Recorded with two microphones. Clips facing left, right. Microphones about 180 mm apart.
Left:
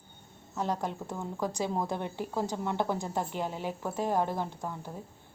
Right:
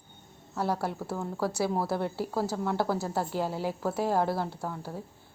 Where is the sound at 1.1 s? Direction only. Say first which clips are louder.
Right 3 dB; 5° right (ahead or behind).